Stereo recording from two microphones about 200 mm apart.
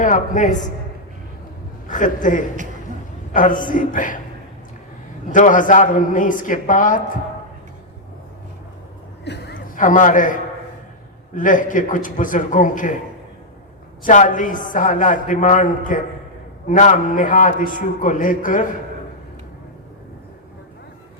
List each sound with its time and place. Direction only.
0.0 s a man's voice: 40° left (ahead or behind)
1.9 s a man's voice: 40° left (ahead or behind)
5.3 s a man's voice: 40° left (ahead or behind)
9.2 s a sound: 55° left (ahead or behind)
9.6 s a man's voice: 40° left (ahead or behind)
14.0 s a man's voice: 40° left (ahead or behind)